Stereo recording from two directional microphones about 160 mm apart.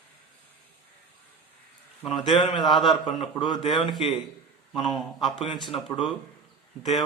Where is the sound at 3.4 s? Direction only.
30° left (ahead or behind).